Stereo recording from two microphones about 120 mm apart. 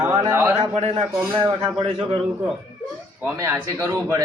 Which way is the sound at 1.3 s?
45° right (ahead or behind).